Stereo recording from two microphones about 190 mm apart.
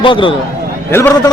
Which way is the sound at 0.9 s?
15° left (ahead or behind).